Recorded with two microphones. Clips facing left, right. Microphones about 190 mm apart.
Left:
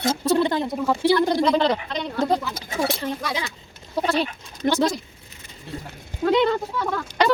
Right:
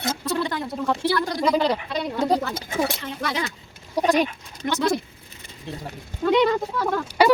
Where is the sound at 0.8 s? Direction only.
5° left (ahead or behind).